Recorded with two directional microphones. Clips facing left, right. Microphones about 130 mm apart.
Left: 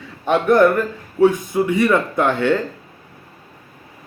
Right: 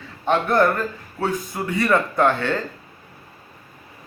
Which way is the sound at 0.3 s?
15° left (ahead or behind).